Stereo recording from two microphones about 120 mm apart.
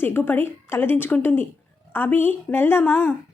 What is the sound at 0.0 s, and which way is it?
A woman's voice, 20° left (ahead or behind).